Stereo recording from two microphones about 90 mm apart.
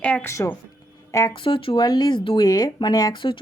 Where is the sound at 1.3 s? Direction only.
75° left (ahead or behind).